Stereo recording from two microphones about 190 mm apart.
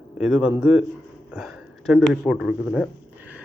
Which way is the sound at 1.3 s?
5° right (ahead or behind).